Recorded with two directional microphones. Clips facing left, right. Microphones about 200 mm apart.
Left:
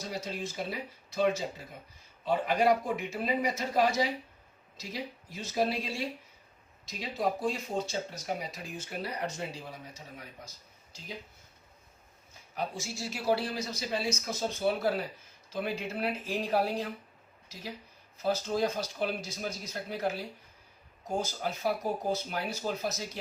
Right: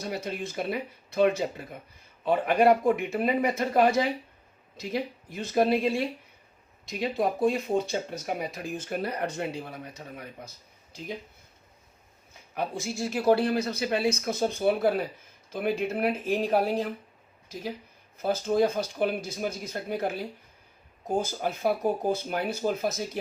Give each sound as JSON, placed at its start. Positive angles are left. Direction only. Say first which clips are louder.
{"t": 0.0, "sound": "speech", "louder": "right 4 dB", "side_deg": -60}
{"t": 12.5, "sound": "speech", "louder": "right 5 dB", "side_deg": -55}
{"t": 18.2, "sound": "speech", "louder": "right 5 dB", "side_deg": -55}